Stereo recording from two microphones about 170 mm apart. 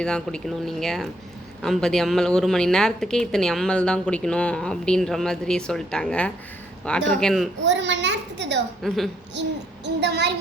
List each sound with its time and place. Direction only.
0.0 s a woman's voice: 5° left (ahead or behind)
7.6 s a child's voice: 90° right
8.8 s a woman's voice: centre (ahead or behind)
9.8 s a child's voice: 90° right